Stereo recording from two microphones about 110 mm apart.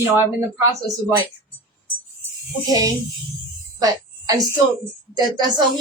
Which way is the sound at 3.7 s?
35° right (ahead or behind).